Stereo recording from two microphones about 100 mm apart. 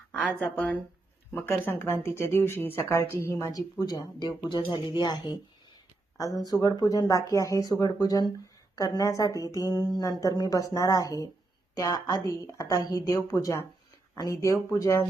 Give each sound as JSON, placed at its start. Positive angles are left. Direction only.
{"t": 0.1, "sound": "a woman's voice", "side_deg": 10}